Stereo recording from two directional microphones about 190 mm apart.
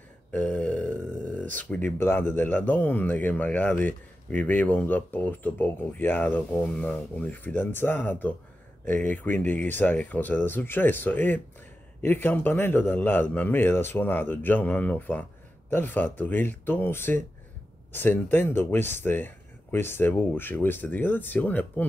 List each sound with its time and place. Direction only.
0.3 s speech: 5° left (ahead or behind)